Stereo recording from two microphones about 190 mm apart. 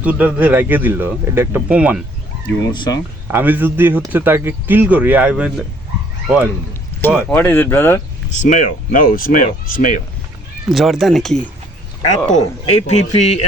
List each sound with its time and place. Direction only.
0.0 s speech: 5° right (ahead or behind)
2.7 s speech: 25° left (ahead or behind)
3.2 s speech: 10° right (ahead or behind)
7.3 s speech: 10° left (ahead or behind)
8.3 s speech: 40° left (ahead or behind)
10.7 s speech: centre (ahead or behind)
12.3 s speech: 35° left (ahead or behind)